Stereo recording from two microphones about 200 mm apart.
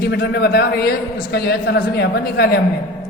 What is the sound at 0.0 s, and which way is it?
A man's voice, 55° left (ahead or behind).